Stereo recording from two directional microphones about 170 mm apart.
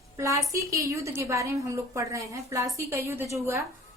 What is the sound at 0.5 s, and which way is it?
A woman's voice, 20° right (ahead or behind).